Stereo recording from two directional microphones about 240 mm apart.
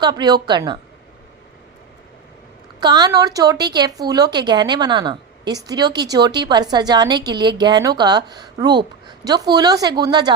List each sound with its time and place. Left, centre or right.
0.0 s a woman's voice: centre
2.8 s a woman's voice: centre